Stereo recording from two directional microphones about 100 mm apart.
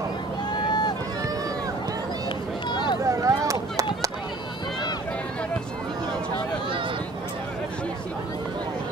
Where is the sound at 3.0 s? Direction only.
35° right (ahead or behind).